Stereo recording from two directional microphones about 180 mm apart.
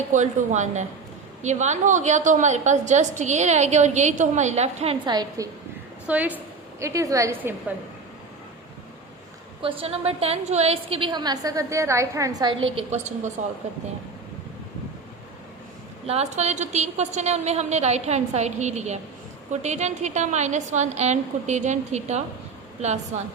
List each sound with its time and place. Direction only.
0.1 s a woman's voice: 40° right (ahead or behind)
5.0 s a woman's voice: 20° right (ahead or behind)
6.1 s a woman's voice: 10° right (ahead or behind)
9.6 s a woman's voice: 30° right (ahead or behind)
16.0 s a woman's voice: 35° right (ahead or behind)